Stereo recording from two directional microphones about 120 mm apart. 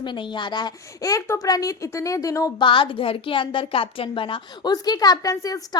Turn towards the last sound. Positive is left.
turn(degrees=30)  # may be behind; listen again after turning